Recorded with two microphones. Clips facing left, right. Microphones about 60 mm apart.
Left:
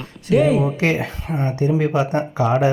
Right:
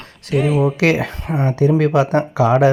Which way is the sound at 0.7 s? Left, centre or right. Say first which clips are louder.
Right 4 dB; right.